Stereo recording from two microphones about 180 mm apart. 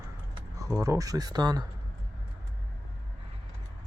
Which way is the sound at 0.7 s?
15° right (ahead or behind).